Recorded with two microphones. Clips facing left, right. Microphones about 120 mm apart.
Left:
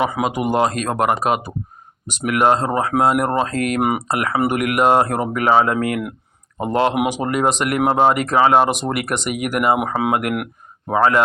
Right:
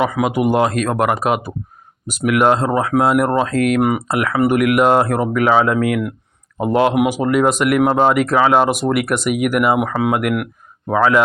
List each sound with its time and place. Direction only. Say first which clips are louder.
0.0 s speech: right 2 dB; 25° left (ahead or behind)
0.3 s speech: right 4 dB; 5° right (ahead or behind)
7.9 s speech: left 2 dB; 10° left (ahead or behind)
8.2 s speech: right 1 dB; centre (ahead or behind)